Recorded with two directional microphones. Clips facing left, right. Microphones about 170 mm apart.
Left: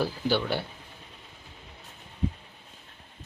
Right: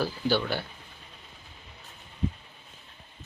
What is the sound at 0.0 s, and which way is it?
Speech, 20° left (ahead or behind).